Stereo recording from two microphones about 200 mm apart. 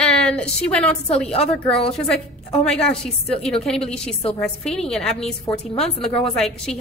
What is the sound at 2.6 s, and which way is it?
A woman's voice, 5° left (ahead or behind).